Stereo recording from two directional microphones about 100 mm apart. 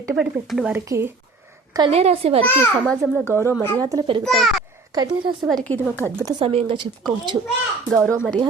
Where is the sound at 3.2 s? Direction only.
25° right (ahead or behind).